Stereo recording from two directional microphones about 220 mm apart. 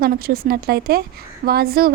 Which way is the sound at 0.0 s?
45° right (ahead or behind).